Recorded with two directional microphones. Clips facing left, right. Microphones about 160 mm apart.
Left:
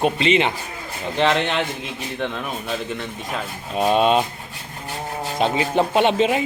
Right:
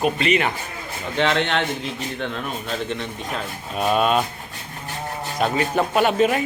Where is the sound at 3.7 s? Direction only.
25° left (ahead or behind).